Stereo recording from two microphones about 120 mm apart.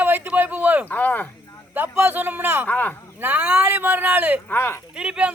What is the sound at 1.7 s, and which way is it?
Speech, 15° right (ahead or behind).